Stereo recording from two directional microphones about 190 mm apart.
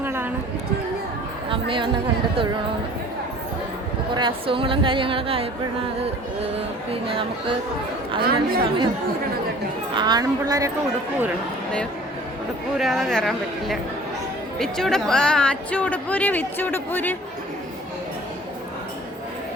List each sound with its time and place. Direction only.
0.0 s chatter: 10° right (ahead or behind)
1.5 s speech: 25° right (ahead or behind)
4.1 s a woman's voice: 25° right (ahead or behind)
8.2 s speech: 55° right (ahead or behind)
8.6 s a woman's voice: 25° right (ahead or behind)
9.9 s a woman's voice: 25° right (ahead or behind)
12.7 s speech: centre (ahead or behind)